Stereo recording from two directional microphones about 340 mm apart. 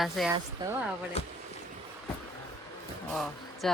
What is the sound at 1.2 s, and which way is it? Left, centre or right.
Speech, centre.